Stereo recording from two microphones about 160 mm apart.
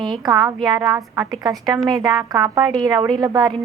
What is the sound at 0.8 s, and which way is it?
Speech, 15° right (ahead or behind).